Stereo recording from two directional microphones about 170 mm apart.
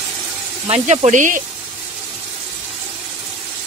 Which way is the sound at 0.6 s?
40° right (ahead or behind).